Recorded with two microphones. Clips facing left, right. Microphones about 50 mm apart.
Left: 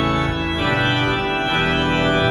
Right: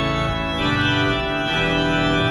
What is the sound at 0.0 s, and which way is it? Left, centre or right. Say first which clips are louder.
Organ: left 2 dB; centre.